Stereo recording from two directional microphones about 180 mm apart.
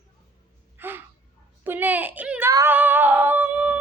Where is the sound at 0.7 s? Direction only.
10° right (ahead or behind).